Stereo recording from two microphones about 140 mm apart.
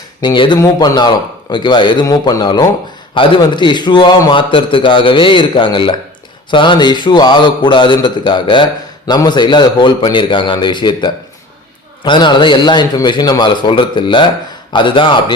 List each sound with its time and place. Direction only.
0.2 s a man's voice: 35° left (ahead or behind)